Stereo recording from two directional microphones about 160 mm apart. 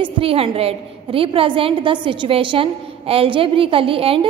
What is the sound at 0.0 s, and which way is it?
A woman's voice, 35° right (ahead or behind).